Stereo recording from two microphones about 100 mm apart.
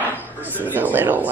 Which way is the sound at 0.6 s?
15° right (ahead or behind).